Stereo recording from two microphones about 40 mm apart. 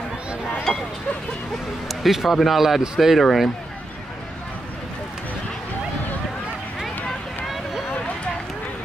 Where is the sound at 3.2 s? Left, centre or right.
Centre.